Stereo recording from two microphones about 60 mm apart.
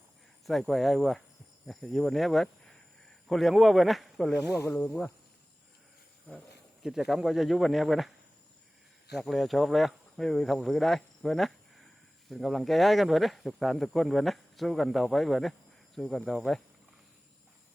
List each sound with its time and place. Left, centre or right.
0.4 s speech: centre
4.5 s speech: left
6.8 s speech: centre
9.1 s speech: centre